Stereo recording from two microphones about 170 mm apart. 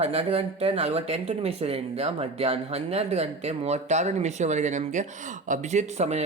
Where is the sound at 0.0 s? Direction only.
40° right (ahead or behind).